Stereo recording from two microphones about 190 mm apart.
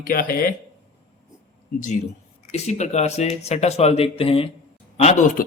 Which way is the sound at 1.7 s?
45° left (ahead or behind).